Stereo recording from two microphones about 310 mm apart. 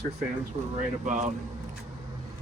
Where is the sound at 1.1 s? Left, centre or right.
Right.